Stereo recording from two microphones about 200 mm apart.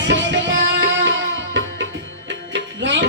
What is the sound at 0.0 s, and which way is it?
Music, 65° right (ahead or behind).